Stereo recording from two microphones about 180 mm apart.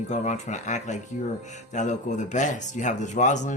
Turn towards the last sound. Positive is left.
turn(degrees=40)  # may be behind; listen again after turning